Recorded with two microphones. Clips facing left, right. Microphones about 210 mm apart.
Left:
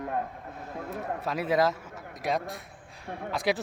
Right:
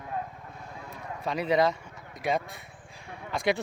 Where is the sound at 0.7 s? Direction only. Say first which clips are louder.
Left 8 dB; 50° left (ahead or behind).